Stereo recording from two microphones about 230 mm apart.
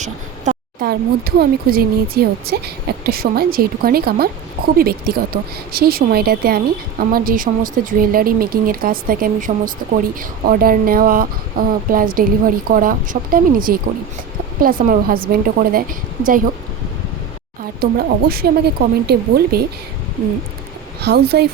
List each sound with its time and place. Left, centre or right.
0.0 s a woman's voice: right
17.7 s a woman's voice: right
21.0 s speech: right